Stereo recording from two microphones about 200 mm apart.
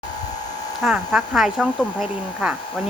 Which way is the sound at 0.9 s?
Centre (ahead or behind).